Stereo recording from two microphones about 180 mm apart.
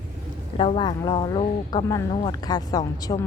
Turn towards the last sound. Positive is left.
turn(degrees=20)  # may be behind; listen again after turning